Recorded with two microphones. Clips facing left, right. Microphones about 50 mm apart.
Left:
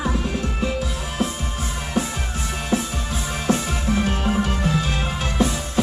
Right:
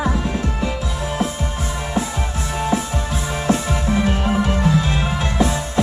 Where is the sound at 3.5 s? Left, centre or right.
Centre.